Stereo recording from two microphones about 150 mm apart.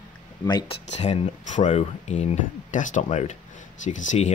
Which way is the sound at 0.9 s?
50° left (ahead or behind).